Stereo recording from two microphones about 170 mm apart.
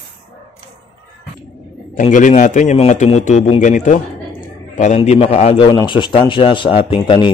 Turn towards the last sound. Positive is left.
turn(degrees=30)  # may be behind; listen again after turning